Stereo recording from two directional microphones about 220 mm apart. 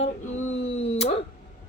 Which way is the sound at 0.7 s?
30° left (ahead or behind).